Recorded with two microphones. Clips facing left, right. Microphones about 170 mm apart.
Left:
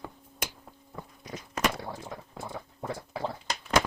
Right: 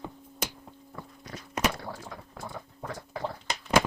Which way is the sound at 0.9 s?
15° left (ahead or behind).